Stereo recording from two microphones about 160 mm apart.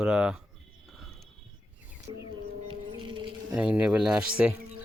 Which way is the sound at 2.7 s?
30° right (ahead or behind).